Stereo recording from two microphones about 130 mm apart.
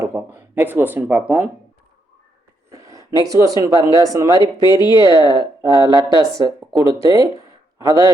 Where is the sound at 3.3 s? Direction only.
25° right (ahead or behind).